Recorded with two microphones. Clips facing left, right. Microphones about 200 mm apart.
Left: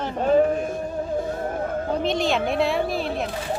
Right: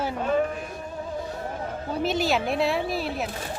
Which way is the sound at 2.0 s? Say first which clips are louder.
Right 1 dB; 5° right (ahead or behind).